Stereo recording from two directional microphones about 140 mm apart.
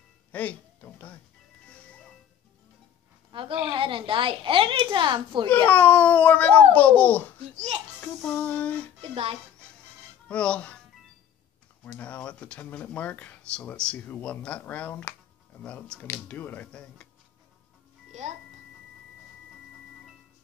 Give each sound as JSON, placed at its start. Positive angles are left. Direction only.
{"t": 0.3, "sound": "speech", "side_deg": 10}
{"t": 3.3, "sound": "a woman's voice", "side_deg": -40}
{"t": 5.5, "sound": "speech", "side_deg": 10}
{"t": 9.0, "sound": "a child's voice", "side_deg": -45}
{"t": 10.2, "sound": "speech", "side_deg": 10}
{"t": 11.8, "sound": "speech", "side_deg": 10}